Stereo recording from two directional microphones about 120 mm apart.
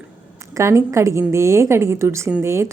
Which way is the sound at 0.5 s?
25° right (ahead or behind).